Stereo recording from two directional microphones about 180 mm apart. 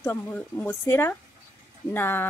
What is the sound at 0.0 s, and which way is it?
Speech, 10° left (ahead or behind).